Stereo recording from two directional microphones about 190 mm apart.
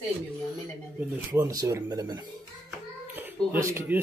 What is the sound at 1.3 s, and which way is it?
Speech, 15° right (ahead or behind).